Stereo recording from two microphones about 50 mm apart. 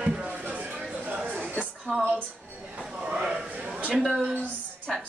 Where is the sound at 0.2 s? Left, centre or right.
Right.